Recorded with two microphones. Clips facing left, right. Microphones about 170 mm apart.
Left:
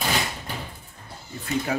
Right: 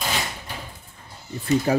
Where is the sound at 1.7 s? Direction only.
35° right (ahead or behind).